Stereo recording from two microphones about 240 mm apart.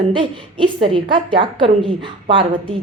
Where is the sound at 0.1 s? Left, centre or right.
Right.